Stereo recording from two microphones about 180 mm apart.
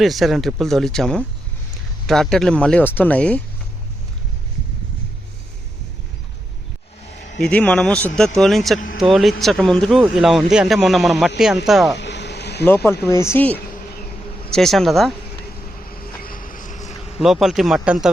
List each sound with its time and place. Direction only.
0.0 s speech: centre (ahead or behind)
7.4 s speech: 5° left (ahead or behind)
11.9 s a sound: 75° left (ahead or behind)
12.6 s speech: 15° left (ahead or behind)
16.0 s vehicle: 50° left (ahead or behind)
17.2 s speech: centre (ahead or behind)